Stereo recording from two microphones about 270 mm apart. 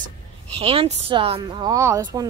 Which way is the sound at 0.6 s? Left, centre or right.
Right.